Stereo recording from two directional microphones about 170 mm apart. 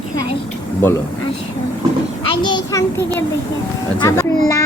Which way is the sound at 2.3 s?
25° left (ahead or behind).